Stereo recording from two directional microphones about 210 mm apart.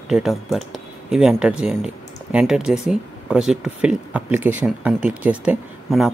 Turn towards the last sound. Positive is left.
turn(degrees=-5)  # may be behind; listen again after turning